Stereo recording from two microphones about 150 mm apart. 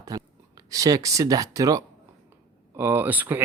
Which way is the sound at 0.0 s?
25° right (ahead or behind).